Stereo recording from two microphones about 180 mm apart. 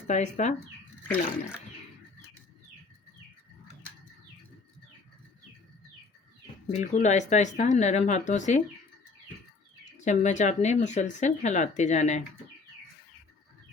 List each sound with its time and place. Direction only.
0.1 s speech: 40° left (ahead or behind)
6.7 s speech: 40° left (ahead or behind)
10.0 s speech: 40° left (ahead or behind)